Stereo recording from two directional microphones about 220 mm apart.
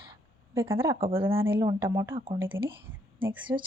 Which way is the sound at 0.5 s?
10° right (ahead or behind).